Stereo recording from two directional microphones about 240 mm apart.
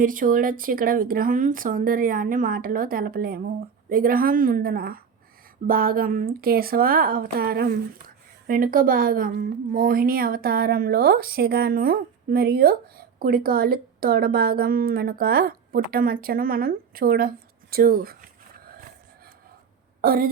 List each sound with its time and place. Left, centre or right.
0.0 s a woman's voice: right
20.0 s a woman's voice: right